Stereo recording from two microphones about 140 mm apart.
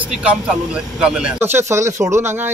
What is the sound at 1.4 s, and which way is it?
Speech, 15° right (ahead or behind).